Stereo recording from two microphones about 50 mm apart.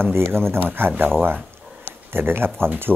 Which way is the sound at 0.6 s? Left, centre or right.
Right.